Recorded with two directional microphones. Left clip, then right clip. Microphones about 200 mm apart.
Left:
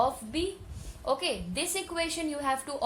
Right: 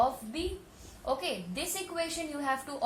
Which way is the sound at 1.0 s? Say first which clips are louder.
Left 3 dB; 55° left (ahead or behind).